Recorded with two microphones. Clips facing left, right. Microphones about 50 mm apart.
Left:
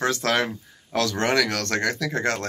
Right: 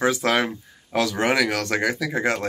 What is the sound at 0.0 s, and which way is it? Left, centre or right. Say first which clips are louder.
Speech: right 2 dB; centre.